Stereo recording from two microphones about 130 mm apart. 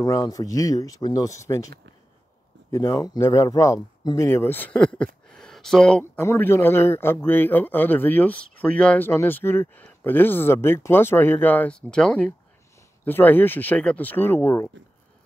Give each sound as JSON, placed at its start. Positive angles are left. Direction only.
{"t": 0.0, "sound": "speech", "side_deg": 30}
{"t": 2.7, "sound": "speech", "side_deg": 25}
{"t": 4.3, "sound": "speech", "side_deg": 15}
{"t": 6.2, "sound": "a man's voice", "side_deg": 20}